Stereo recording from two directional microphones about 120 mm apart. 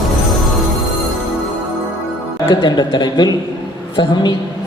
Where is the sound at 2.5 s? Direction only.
35° left (ahead or behind).